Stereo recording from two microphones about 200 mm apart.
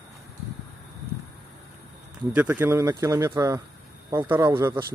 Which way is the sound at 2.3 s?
10° right (ahead or behind).